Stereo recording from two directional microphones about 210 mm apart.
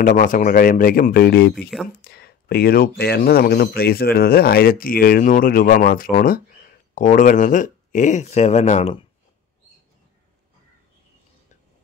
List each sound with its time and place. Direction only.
0.0 s speech: 40° left (ahead or behind)
1.5 s speech: centre (ahead or behind)
2.0 s a sound: 50° left (ahead or behind)
3.0 s speech: 50° left (ahead or behind); by 9.0 s 30° left (ahead or behind)